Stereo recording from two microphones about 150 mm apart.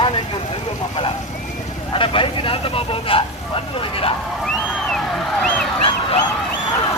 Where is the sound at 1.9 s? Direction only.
35° left (ahead or behind).